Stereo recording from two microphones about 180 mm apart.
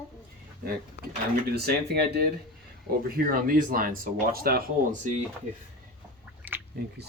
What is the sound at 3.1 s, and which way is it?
Speech, 50° right (ahead or behind).